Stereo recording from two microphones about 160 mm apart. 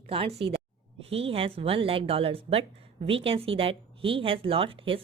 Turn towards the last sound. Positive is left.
turn(degrees=-35)  # may be behind; listen again after turning